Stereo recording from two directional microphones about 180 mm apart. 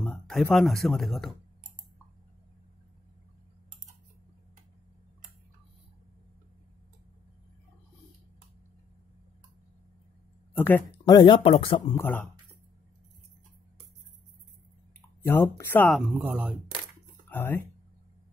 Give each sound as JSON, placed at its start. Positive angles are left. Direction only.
{"t": 0.0, "sound": "a sound", "side_deg": 5}
{"t": 0.8, "sound": "speech", "side_deg": 0}
{"t": 10.5, "sound": "a sound", "side_deg": 10}
{"t": 11.1, "sound": "speech", "side_deg": 25}
{"t": 11.9, "sound": "speech", "side_deg": 10}
{"t": 15.0, "sound": "speech", "side_deg": 10}
{"t": 15.9, "sound": "speech", "side_deg": 0}
{"t": 17.3, "sound": "speech", "side_deg": 10}